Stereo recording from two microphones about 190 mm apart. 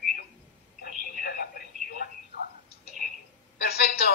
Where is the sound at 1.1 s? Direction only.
50° left (ahead or behind).